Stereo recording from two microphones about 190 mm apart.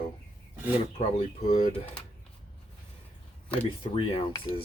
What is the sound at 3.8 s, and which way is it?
Speech, 25° left (ahead or behind).